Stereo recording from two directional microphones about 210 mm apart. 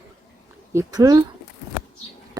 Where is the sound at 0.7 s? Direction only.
15° right (ahead or behind).